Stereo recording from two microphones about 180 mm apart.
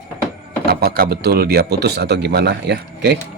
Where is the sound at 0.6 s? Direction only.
60° right (ahead or behind).